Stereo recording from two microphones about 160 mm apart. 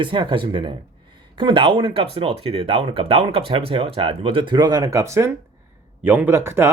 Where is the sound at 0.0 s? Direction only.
30° right (ahead or behind).